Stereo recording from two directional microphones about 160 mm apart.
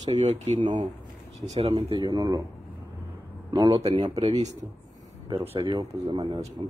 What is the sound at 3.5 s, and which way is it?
Speech, 25° right (ahead or behind).